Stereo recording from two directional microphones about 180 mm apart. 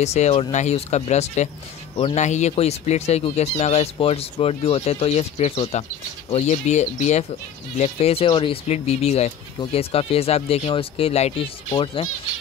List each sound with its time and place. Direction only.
0.0 s speech: 40° left (ahead or behind)